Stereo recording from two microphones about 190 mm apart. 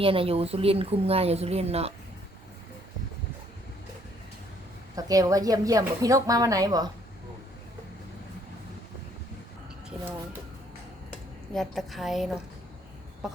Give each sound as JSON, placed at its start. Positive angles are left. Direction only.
{"t": 0.0, "sound": "speech", "side_deg": -30}
{"t": 4.9, "sound": "a woman's voice", "side_deg": -20}
{"t": 11.5, "sound": "a woman's voice", "side_deg": 0}
{"t": 13.2, "sound": "a sound", "side_deg": -5}